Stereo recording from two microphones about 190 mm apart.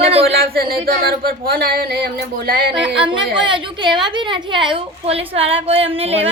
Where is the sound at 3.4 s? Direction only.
25° right (ahead or behind).